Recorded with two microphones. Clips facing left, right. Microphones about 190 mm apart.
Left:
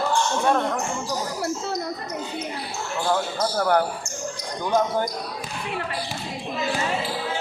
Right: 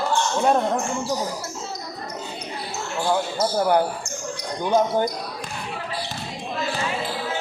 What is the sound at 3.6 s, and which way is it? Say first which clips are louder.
Speech: right 1 dB; 15° right (ahead or behind).